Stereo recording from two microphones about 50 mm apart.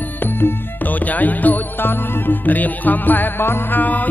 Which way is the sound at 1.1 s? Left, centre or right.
Left.